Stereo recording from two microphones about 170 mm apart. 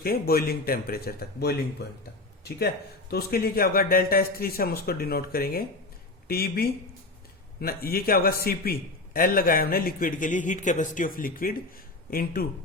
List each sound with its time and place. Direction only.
0.0 s a man's voice: 65° left (ahead or behind)
3.1 s a man's voice: 65° left (ahead or behind)